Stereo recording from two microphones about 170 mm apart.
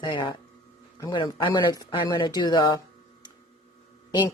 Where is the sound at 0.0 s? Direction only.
25° left (ahead or behind).